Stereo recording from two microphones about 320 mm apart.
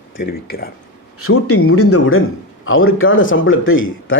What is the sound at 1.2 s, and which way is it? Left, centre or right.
Speech, left.